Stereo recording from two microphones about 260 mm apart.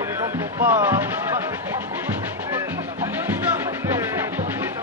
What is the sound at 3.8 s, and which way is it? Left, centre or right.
Music, centre.